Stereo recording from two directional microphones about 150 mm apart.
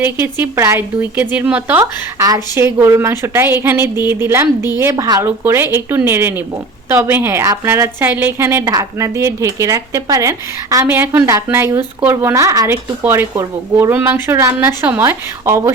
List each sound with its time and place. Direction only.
0.0 s a woman's voice: 15° right (ahead or behind)
1.8 s a woman's voice: 25° right (ahead or behind)